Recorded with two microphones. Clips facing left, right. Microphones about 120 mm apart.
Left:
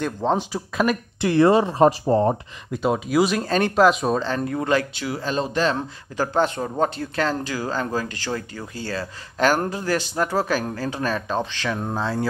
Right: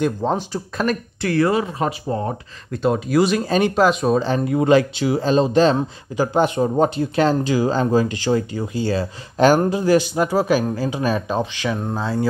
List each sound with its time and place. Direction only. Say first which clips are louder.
0.0 s speech: right 2 dB; 5° right (ahead or behind)
1.2 s speech: left 2 dB; 20° left (ahead or behind)
2.7 s speech: right 3 dB; 5° left (ahead or behind)
4.4 s speech: right 6 dB; 15° right (ahead or behind)
5.8 s speech: right 4 dB; 10° right (ahead or behind)